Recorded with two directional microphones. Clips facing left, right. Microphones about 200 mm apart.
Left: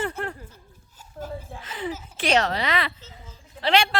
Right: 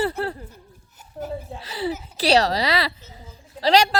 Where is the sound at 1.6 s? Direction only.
35° right (ahead or behind).